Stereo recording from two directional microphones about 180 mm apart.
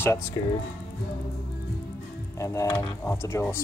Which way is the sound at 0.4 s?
20° left (ahead or behind).